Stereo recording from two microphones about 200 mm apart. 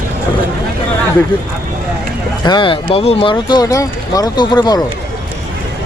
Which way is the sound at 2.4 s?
25° left (ahead or behind).